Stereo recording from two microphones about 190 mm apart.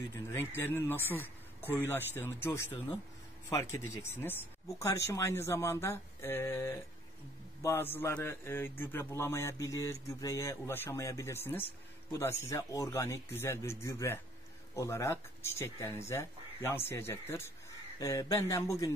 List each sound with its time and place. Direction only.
0.1 s a man's voice: 10° left (ahead or behind)